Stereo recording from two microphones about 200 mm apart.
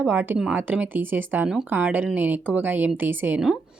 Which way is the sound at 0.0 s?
10° right (ahead or behind).